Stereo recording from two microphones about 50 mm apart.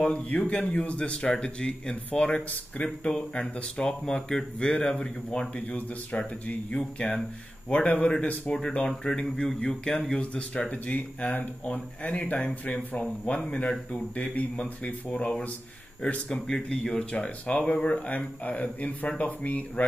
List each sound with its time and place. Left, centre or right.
0.0 s speech: left